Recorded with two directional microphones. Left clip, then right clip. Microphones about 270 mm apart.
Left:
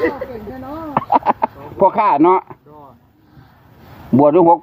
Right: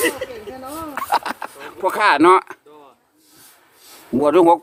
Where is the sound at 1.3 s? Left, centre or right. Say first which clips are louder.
Left 12 dB; right.